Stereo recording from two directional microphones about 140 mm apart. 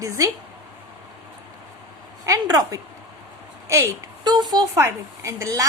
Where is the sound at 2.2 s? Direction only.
25° right (ahead or behind).